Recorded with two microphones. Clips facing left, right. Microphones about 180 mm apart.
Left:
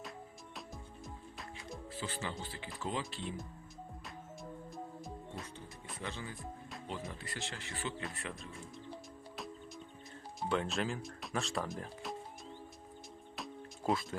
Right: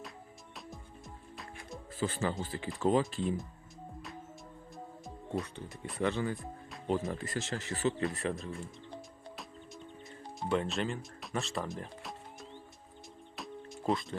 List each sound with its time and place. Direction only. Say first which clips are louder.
0.5 s music: right 1 dB; centre (ahead or behind)
1.9 s speech: right 9 dB; 50° right (ahead or behind)
6.0 s speech: right 12 dB; 65° right (ahead or behind)
6.8 s speech: right 12 dB; 45° right (ahead or behind)
8.9 s music: right 1 dB; centre (ahead or behind)
10.5 s speech: right 3 dB; centre (ahead or behind)
13.3 s music: right 3 dB; centre (ahead or behind)